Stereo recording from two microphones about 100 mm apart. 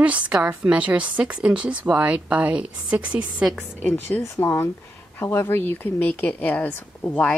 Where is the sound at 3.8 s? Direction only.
15° left (ahead or behind).